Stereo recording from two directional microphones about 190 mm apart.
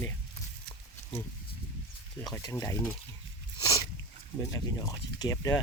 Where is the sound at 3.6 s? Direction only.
20° left (ahead or behind).